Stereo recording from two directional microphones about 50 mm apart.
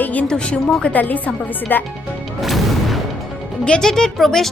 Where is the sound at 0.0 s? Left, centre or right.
Left.